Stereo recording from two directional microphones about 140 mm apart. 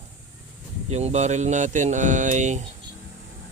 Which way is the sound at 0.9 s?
50° right (ahead or behind).